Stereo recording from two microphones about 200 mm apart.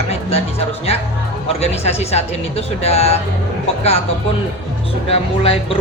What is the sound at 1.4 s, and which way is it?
Speech, 30° left (ahead or behind).